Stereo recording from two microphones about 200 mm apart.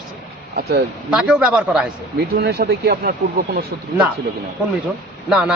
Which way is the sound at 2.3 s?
55° right (ahead or behind).